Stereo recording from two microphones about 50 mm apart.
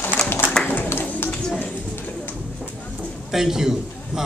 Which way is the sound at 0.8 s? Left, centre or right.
Left.